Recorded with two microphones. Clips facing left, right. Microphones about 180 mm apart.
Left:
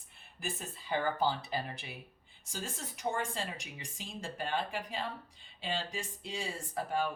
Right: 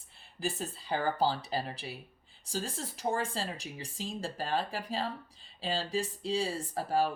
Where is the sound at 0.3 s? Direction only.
35° right (ahead or behind).